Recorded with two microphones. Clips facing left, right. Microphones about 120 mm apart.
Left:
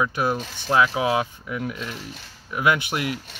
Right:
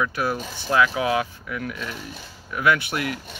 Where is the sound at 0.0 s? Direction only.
20° left (ahead or behind).